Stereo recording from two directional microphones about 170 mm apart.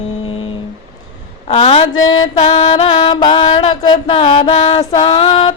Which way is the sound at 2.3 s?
35° left (ahead or behind).